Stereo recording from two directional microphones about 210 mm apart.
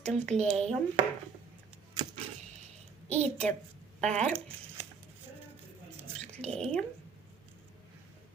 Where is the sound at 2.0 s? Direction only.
20° right (ahead or behind).